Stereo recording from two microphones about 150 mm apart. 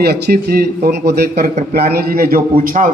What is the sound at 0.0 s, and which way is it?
A man's voice, 90° right.